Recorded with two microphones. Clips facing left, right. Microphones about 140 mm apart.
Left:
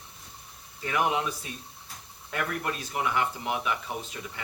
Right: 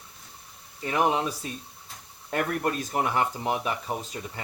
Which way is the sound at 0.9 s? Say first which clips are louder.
Right 3 dB; 30° right (ahead or behind).